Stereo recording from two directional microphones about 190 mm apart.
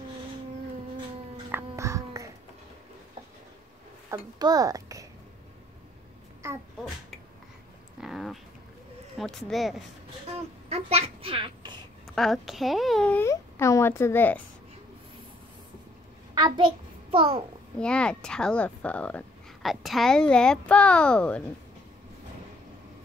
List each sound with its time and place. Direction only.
1.5 s music: 15° right (ahead or behind)
4.1 s a child's voice: 20° right (ahead or behind)
8.0 s a sound: centre (ahead or behind)
9.2 s speech: centre (ahead or behind)
10.7 s a child's voice: 35° right (ahead or behind)
12.2 s a child's voice: centre (ahead or behind)
16.3 s a sound: 25° right (ahead or behind)
17.7 s speech: 5° left (ahead or behind)